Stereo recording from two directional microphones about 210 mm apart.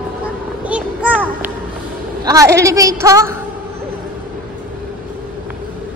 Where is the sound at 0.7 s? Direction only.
5° right (ahead or behind).